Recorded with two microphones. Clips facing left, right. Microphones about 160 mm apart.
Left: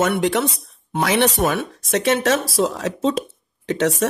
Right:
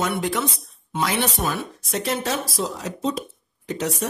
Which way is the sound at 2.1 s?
80° left.